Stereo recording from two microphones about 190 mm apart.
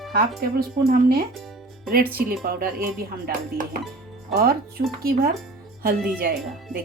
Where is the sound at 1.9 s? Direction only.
50° right (ahead or behind).